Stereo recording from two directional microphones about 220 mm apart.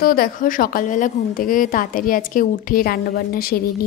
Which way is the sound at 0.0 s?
40° left (ahead or behind).